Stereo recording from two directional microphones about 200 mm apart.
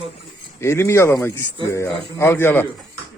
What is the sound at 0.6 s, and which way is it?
Speech, 15° left (ahead or behind).